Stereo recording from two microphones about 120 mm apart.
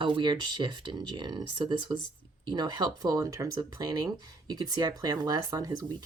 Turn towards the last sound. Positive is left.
turn(degrees=-30)  # may be behind; listen again after turning